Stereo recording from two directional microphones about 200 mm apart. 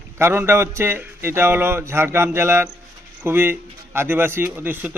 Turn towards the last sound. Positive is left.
turn(degrees=-10)  # may be behind; listen again after turning